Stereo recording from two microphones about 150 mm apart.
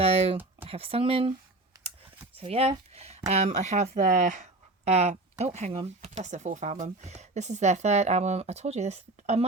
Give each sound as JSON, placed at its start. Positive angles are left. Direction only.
{"t": 0.0, "sound": "a sound", "side_deg": -40}
{"t": 0.6, "sound": "speech", "side_deg": -40}
{"t": 4.9, "sound": "speech", "side_deg": -45}